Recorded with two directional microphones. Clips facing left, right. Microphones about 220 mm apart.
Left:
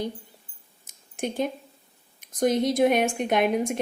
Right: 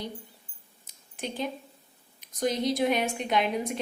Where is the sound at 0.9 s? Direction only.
50° left (ahead or behind).